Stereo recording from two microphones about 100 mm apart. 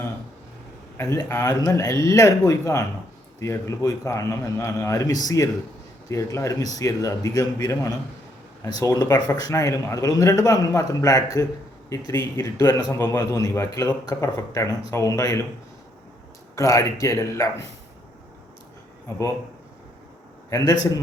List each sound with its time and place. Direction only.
0.9 s a man's voice: 30° left (ahead or behind)
16.6 s a man's voice: 30° left (ahead or behind)
20.5 s a man's voice: 35° left (ahead or behind)